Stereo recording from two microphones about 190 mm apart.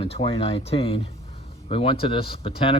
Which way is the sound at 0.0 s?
30° left (ahead or behind).